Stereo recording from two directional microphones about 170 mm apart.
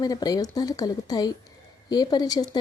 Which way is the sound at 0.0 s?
25° left (ahead or behind).